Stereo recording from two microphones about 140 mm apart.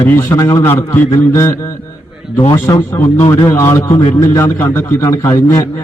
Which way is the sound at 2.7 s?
15° left (ahead or behind).